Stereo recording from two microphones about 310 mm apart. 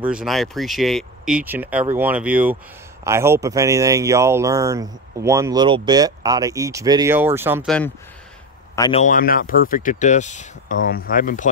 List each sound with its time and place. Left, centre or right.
0.0 s speech: centre
8.7 s a man's voice: centre
9.0 s speech: left